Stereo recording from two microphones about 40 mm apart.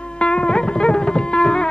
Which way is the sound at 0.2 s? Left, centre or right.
Left.